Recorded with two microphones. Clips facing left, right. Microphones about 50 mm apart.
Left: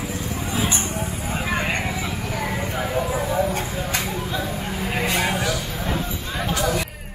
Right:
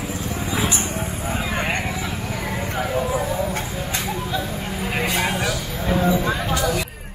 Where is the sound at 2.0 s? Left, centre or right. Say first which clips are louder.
Left 1 dB; centre.